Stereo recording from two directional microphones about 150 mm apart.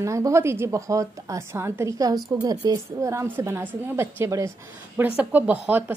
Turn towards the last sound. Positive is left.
turn(degrees=-10)  # may be behind; listen again after turning